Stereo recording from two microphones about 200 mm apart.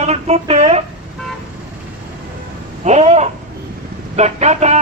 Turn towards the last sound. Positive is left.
turn(degrees=-35)  # may be behind; listen again after turning